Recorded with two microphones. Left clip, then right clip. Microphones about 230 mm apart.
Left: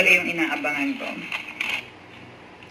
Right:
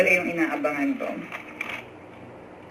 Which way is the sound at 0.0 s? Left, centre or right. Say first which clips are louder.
Left 2 dB; left.